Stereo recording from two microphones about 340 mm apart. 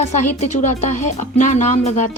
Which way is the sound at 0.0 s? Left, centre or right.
Centre.